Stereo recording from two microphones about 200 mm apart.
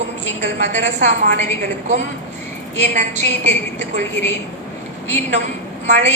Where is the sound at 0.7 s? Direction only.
35° right (ahead or behind).